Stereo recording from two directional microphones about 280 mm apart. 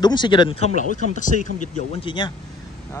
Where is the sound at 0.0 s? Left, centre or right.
Centre.